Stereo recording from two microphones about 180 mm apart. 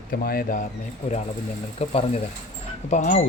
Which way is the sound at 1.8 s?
35° left (ahead or behind).